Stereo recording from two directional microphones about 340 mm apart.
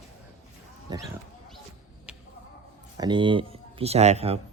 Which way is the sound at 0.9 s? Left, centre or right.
Centre.